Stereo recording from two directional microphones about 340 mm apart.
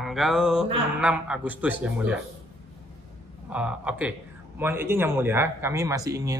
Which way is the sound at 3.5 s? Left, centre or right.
Centre.